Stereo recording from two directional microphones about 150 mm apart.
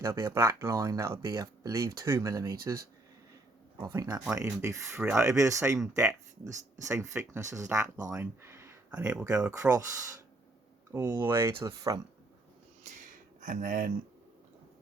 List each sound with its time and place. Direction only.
0.0 s speech: 20° right (ahead or behind)
3.8 s speech: 25° right (ahead or behind); by 9.6 s 5° right (ahead or behind)
9.6 s speech: 20° right (ahead or behind)
12.8 s a sound: 55° right (ahead or behind)